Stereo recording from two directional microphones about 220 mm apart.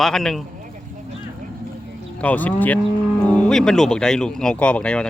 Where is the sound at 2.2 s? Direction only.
5° left (ahead or behind).